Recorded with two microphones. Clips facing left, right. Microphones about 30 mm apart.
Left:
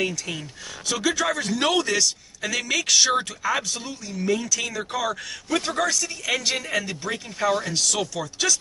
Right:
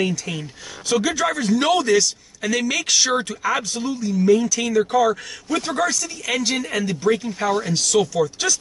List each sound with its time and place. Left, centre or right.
0.0 s speech: centre